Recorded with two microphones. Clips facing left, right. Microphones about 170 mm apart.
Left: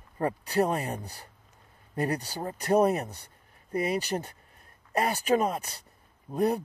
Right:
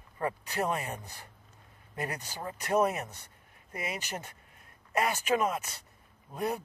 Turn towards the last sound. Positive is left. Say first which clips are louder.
# left 7 dB
turn(degrees=35)  # may be behind; listen again after turning